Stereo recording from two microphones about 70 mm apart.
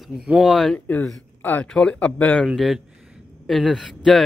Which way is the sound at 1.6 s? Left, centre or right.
Centre.